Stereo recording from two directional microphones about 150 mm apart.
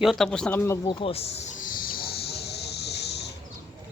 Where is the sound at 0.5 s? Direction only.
15° left (ahead or behind).